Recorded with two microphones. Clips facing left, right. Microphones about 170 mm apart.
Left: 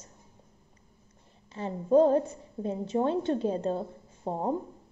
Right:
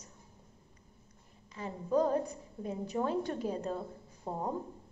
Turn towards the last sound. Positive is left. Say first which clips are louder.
# left 5 dB
turn(degrees=30)  # may be behind; listen again after turning